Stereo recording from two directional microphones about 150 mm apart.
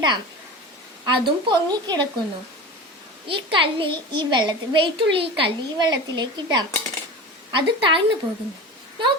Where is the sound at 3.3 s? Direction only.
35° right (ahead or behind).